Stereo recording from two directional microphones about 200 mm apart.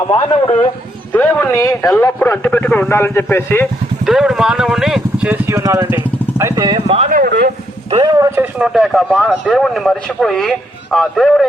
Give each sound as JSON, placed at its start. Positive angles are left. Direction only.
{"t": 1.1, "sound": "a man's voice", "side_deg": 10}
{"t": 4.0, "sound": "speech", "side_deg": 0}
{"t": 6.7, "sound": "speech", "side_deg": -30}
{"t": 7.2, "sound": "a man's voice", "side_deg": -50}
{"t": 7.9, "sound": "speech", "side_deg": -20}
{"t": 8.4, "sound": "speech", "side_deg": -5}